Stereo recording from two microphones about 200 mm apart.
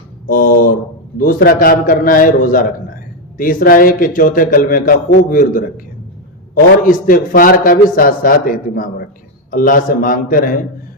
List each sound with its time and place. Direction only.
0.3 s a man's voice: 45° left (ahead or behind)